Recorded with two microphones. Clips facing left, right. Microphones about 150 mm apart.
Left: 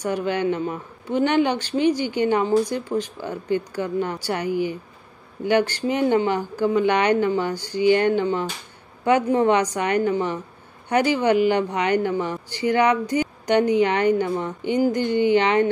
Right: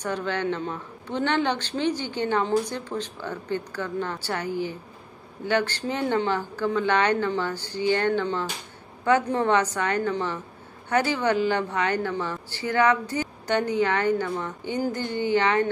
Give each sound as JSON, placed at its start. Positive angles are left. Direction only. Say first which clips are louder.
{"t": 0.0, "sound": "speech", "louder": "left 4 dB", "side_deg": 10}